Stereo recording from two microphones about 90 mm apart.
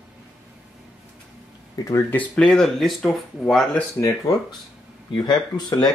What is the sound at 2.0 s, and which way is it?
Speech, 15° left (ahead or behind).